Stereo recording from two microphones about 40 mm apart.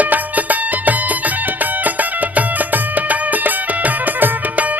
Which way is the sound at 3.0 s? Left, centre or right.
Right.